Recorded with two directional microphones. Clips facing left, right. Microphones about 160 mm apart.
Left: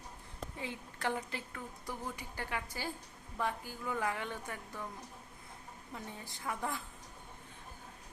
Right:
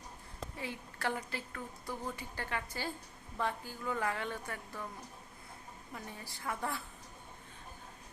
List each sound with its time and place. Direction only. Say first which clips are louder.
0.6 s a woman's voice: even; 20° left (ahead or behind)
5.9 s a woman's voice: left 1 dB; 20° left (ahead or behind)